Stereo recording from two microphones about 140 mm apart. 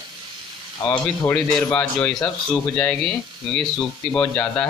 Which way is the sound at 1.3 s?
10° left (ahead or behind).